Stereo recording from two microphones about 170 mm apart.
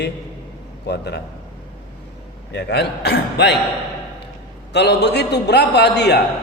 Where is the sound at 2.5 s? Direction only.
90° left.